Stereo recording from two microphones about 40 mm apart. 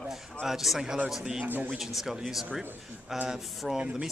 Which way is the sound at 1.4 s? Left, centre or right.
Right.